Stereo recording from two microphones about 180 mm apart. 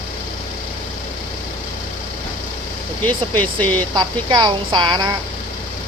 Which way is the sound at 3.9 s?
25° right (ahead or behind).